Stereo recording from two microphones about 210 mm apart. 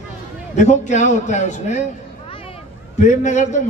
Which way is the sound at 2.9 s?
35° left (ahead or behind).